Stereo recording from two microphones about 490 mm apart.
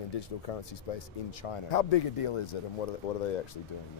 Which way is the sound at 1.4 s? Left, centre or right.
Left.